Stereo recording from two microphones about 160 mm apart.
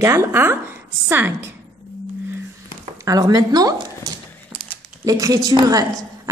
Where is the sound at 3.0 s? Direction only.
25° right (ahead or behind).